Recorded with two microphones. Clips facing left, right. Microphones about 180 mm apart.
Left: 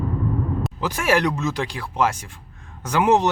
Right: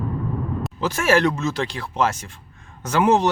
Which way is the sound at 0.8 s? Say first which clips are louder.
Right 3 dB; 15° left (ahead or behind).